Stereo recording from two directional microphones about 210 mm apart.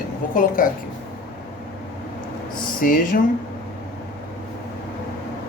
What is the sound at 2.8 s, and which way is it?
Speech, 40° left (ahead or behind).